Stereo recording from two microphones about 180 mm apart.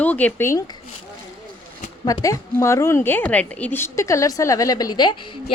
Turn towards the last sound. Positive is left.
turn(degrees=25)  # may be behind; listen again after turning